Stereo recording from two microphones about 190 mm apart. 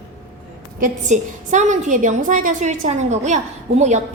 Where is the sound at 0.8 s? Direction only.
40° right (ahead or behind).